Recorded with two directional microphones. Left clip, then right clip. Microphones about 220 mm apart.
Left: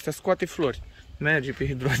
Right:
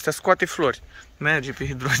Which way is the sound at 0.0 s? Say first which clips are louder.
Right 6 dB; 5° left (ahead or behind).